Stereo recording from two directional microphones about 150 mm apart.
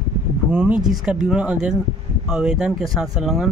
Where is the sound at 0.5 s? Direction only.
5° right (ahead or behind).